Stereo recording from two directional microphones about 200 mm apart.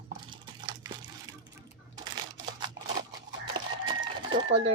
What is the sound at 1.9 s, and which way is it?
Camera, 20° right (ahead or behind).